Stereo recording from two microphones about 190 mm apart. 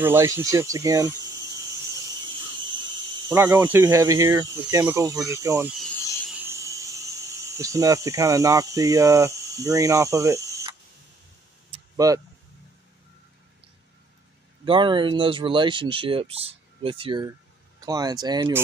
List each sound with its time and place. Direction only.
0.0 s speech: 10° right (ahead or behind)
3.3 s speech: 10° right (ahead or behind)
5.7 s speech: centre (ahead or behind)
6.3 s cricket: 15° right (ahead or behind)
12.0 s speech: 20° right (ahead or behind)
14.6 s speech: 25° right (ahead or behind)